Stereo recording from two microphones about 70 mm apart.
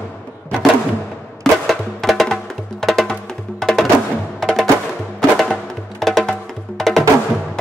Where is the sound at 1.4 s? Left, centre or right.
Centre.